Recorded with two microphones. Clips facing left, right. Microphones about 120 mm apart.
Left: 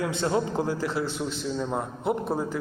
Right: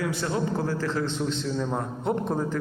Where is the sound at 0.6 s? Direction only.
15° left (ahead or behind).